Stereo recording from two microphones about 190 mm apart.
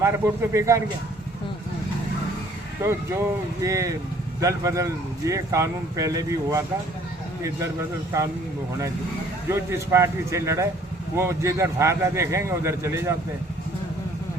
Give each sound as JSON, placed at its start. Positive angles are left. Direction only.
{"t": 0.0, "sound": "speech", "side_deg": -15}
{"t": 2.8, "sound": "speech", "side_deg": -15}
{"t": 9.5, "sound": "speech", "side_deg": -15}